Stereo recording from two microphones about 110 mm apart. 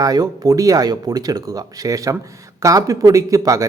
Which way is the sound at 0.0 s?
35° right (ahead or behind).